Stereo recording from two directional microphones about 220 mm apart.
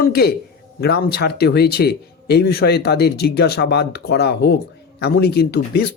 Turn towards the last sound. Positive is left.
turn(degrees=45)  # may be behind; listen again after turning